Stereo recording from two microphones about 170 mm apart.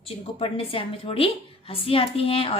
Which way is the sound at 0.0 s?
35° left (ahead or behind).